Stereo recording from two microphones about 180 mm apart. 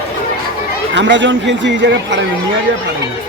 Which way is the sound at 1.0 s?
85° right.